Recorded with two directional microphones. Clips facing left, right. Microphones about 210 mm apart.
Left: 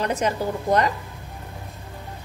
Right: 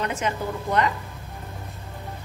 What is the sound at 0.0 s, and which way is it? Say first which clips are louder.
Speech: left 3 dB; 40° left (ahead or behind).